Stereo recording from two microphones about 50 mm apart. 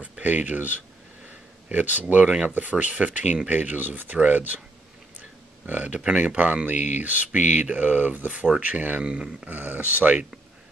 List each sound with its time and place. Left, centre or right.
0.2 s speech: right
1.7 s speech: right
5.7 s speech: right
8.3 s speech: right
9.0 s speech: centre
9.5 s speech: right